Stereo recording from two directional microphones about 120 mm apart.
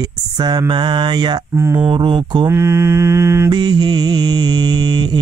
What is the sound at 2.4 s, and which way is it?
Mantra, 20° right (ahead or behind).